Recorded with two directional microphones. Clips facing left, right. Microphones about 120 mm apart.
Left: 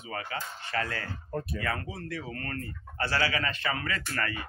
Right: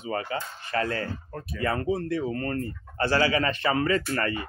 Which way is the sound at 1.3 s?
Centre (ahead or behind).